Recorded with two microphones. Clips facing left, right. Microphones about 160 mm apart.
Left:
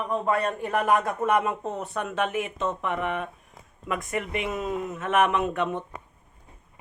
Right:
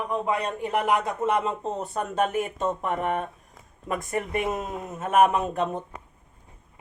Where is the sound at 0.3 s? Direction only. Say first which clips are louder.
Left 1 dB; 15° right (ahead or behind); by 5.8 s 35° right (ahead or behind).